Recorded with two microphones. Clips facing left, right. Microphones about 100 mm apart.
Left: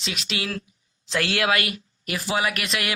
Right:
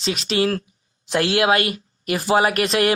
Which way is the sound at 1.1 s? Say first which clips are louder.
Right 5 dB; 25° right (ahead or behind).